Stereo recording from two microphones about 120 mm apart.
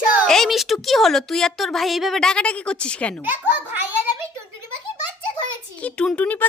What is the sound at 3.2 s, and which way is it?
Speech, 15° right (ahead or behind).